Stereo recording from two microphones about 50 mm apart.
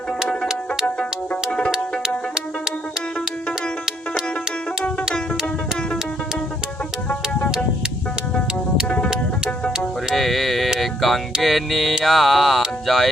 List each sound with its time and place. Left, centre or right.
1.5 s music: left
7.1 s music: left
10.2 s mantra: centre
10.8 s music: centre
12.0 s speech: centre